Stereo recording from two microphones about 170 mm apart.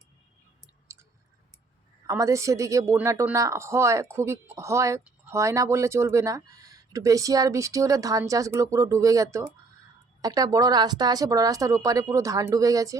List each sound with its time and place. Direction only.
2.0 s a woman's voice: 20° right (ahead or behind)